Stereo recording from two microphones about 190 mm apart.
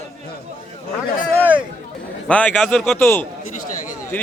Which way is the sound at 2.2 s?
5° left (ahead or behind).